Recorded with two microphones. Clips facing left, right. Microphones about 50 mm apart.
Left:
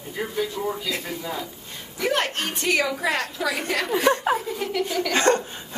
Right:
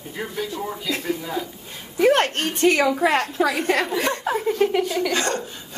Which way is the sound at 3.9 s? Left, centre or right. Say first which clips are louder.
Left 3 dB; left.